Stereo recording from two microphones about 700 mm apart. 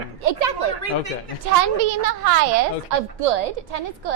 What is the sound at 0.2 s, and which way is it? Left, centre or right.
Speech, right.